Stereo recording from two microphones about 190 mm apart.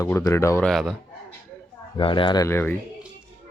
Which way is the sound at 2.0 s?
25° left (ahead or behind).